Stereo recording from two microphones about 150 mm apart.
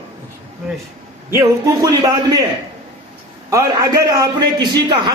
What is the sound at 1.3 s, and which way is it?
A man's voice, 20° right (ahead or behind).